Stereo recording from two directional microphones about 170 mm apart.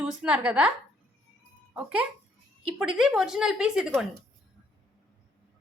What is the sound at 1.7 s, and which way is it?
A child's voice, 5° right (ahead or behind).